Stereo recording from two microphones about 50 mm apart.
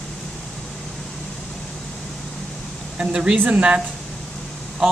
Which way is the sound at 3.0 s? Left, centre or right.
Centre.